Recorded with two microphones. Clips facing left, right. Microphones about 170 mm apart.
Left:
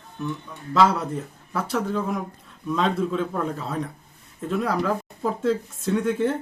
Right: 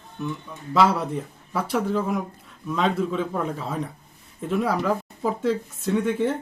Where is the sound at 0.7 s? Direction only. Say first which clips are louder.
Even; 5° right (ahead or behind).